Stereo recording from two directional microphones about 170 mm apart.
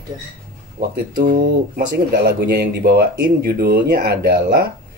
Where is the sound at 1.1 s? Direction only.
60° right (ahead or behind).